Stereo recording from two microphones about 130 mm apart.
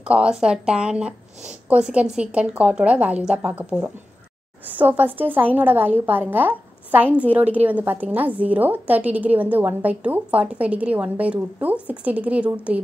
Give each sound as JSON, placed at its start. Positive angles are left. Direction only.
{"t": 0.0, "sound": "a woman's voice", "side_deg": -10}